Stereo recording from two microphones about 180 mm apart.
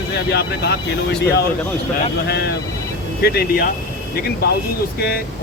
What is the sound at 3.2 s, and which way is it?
Speech, 60° left (ahead or behind).